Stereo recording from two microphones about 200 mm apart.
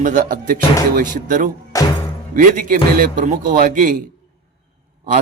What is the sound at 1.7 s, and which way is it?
Music, 15° left (ahead or behind).